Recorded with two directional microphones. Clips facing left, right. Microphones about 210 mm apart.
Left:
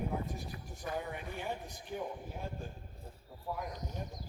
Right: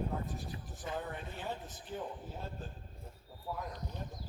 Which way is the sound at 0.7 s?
20° right (ahead or behind).